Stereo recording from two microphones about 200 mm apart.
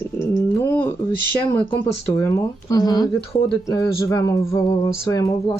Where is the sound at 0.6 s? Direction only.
10° left (ahead or behind).